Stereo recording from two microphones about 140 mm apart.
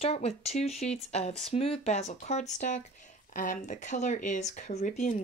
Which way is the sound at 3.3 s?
75° left (ahead or behind).